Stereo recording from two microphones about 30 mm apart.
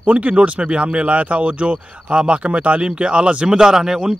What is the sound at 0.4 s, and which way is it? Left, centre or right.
Speech, right.